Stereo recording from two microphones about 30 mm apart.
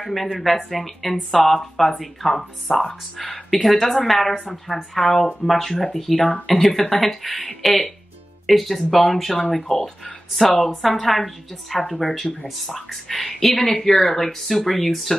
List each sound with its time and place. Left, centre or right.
0.1 s speech: centre
5.0 s speech: centre
7.3 s speech: centre
8.5 s speech: centre